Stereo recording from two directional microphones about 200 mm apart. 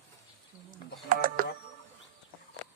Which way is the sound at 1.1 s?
45° right (ahead or behind).